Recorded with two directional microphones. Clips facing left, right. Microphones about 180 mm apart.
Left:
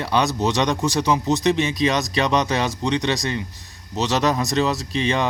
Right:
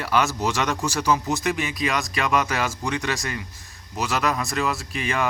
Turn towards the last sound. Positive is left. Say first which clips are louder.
# left 4 dB
turn(degrees=25)  # may be behind; listen again after turning